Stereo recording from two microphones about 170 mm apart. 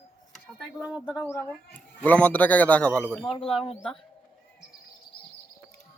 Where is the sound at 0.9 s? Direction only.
5° right (ahead or behind).